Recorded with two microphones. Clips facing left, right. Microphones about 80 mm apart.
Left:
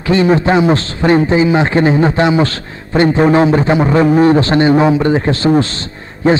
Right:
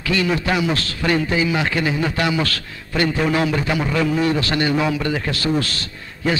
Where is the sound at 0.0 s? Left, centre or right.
Left.